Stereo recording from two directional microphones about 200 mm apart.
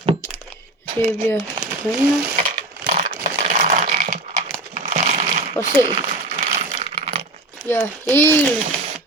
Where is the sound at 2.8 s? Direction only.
40° right (ahead or behind).